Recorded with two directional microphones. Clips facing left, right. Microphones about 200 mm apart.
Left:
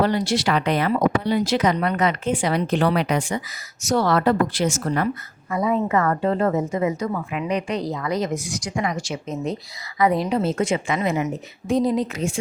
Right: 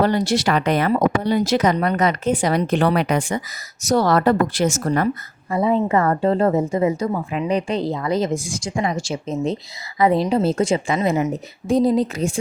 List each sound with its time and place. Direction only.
0.0 s speech: 45° right (ahead or behind)
3.8 s speech: 40° right (ahead or behind)
5.5 s a woman's voice: 30° right (ahead or behind)